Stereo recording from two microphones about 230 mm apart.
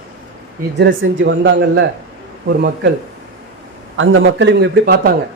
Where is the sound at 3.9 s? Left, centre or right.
Right.